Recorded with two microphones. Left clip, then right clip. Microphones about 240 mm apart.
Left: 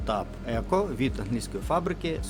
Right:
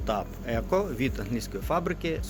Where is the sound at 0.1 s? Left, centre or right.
Centre.